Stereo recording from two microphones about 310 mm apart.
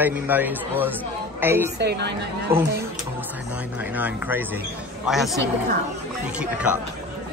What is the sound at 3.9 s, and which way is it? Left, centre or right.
Speech, centre.